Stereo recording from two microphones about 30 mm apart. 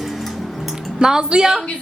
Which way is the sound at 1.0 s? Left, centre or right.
Right.